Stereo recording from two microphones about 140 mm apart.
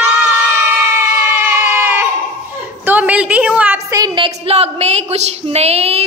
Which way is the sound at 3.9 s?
25° right (ahead or behind).